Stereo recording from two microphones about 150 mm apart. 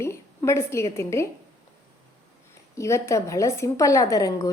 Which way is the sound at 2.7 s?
20° left (ahead or behind).